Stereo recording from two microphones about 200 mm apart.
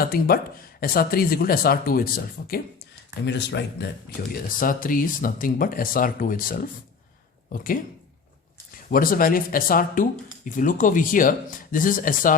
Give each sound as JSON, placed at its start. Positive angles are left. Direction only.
{"t": 0.0, "sound": "speech", "side_deg": 50}
{"t": 3.2, "sound": "speech", "side_deg": 60}
{"t": 4.4, "sound": "speech", "side_deg": 45}
{"t": 8.9, "sound": "speech", "side_deg": 45}